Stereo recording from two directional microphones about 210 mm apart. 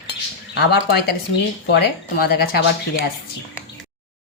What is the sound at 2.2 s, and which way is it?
Speech, 45° left (ahead or behind).